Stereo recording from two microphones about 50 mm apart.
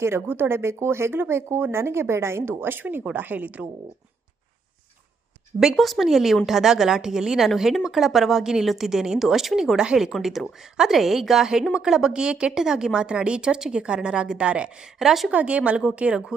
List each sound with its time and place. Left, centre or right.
0.0 s speech: right
2.8 s speech: right
5.7 s a woman's voice: centre
9.7 s a woman's voice: centre
14.9 s a woman's voice: centre
15.3 s speech: right